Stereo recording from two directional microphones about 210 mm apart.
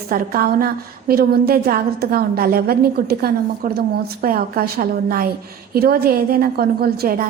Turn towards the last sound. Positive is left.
turn(degrees=-45)  # may be behind; listen again after turning